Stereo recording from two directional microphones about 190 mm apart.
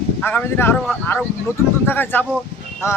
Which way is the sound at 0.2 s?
10° left (ahead or behind).